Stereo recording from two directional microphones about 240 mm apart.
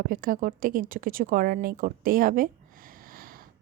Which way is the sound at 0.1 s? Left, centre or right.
Right.